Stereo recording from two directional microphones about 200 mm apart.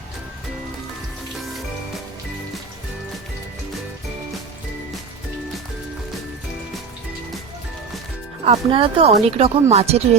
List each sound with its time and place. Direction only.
8.4 s speech: 30° right (ahead or behind)